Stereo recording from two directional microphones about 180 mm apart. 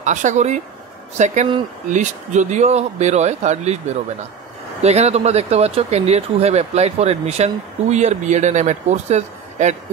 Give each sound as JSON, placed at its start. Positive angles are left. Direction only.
{"t": 0.0, "sound": "speech", "side_deg": -45}